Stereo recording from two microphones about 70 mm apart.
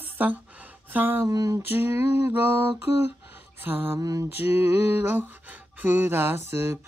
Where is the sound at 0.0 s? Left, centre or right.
Right.